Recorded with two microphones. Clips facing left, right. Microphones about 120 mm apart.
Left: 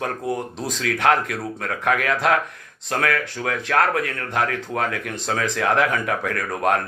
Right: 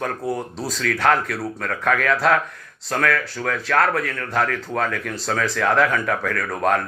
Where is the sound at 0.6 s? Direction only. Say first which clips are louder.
Even; 20° left (ahead or behind).